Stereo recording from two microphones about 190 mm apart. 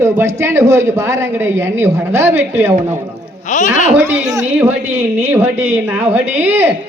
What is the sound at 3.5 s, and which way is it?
Speech, 40° left (ahead or behind).